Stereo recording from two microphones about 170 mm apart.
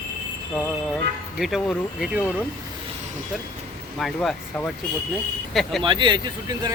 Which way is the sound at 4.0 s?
Centre (ahead or behind).